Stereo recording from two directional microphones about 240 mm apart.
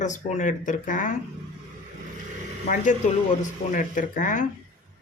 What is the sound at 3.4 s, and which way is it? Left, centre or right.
Speech, left.